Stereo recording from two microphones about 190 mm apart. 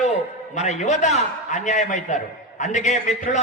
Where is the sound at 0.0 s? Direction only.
40° left (ahead or behind).